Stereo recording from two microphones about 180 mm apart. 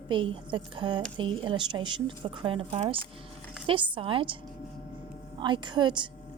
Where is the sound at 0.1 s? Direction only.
25° right (ahead or behind).